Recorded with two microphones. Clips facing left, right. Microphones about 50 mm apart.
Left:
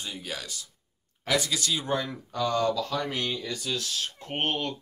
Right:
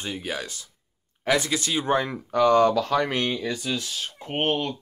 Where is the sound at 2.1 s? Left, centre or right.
Right.